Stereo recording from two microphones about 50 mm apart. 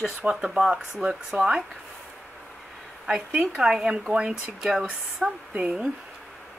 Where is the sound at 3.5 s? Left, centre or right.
Centre.